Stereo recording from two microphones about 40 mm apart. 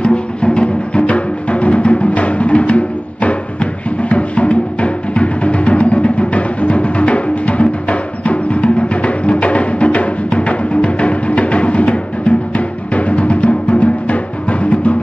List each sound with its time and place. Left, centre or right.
0.0 s music: left